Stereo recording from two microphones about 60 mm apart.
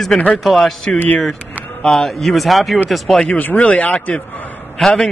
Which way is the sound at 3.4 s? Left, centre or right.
Left.